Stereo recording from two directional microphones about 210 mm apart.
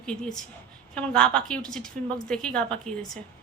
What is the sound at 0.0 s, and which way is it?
Speech, 5° left (ahead or behind).